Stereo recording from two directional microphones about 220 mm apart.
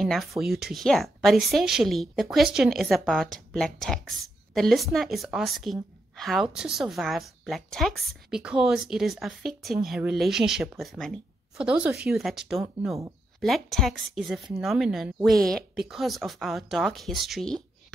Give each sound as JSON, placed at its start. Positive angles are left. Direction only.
{"t": 0.0, "sound": "a woman's voice", "side_deg": 0}